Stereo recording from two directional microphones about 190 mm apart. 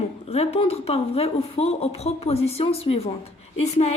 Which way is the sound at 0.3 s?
35° left (ahead or behind).